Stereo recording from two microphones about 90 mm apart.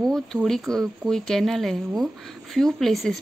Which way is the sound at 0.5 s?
5° left (ahead or behind).